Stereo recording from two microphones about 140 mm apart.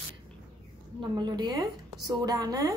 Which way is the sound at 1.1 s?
30° right (ahead or behind).